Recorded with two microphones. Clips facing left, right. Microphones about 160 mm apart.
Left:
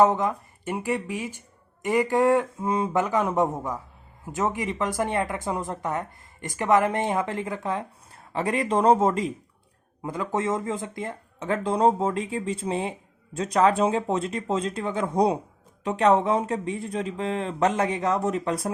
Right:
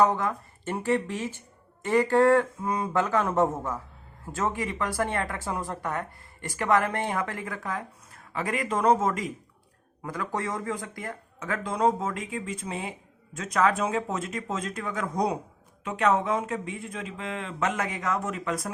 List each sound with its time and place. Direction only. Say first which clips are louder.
0.0 s speech: left 3 dB; 20° left (ahead or behind)